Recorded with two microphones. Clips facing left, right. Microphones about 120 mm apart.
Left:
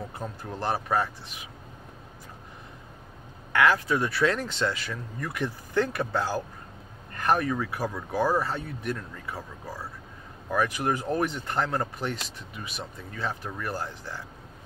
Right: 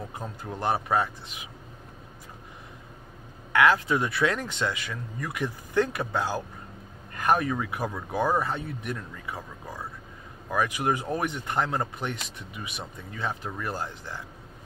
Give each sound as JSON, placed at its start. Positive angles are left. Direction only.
{"t": 0.4, "sound": "speech", "side_deg": -15}
{"t": 3.5, "sound": "speech", "side_deg": -20}
{"t": 10.5, "sound": "speech", "side_deg": -15}